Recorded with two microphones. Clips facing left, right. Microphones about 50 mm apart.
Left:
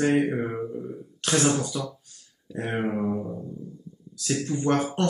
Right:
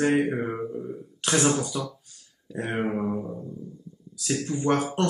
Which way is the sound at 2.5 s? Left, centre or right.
Centre.